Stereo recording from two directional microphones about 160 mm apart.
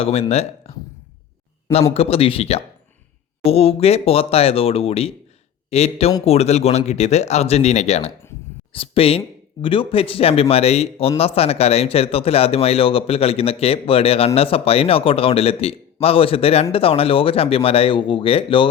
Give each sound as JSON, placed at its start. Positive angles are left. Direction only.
{"t": 0.0, "sound": "speech", "side_deg": 40}
{"t": 1.9, "sound": "speech", "side_deg": 40}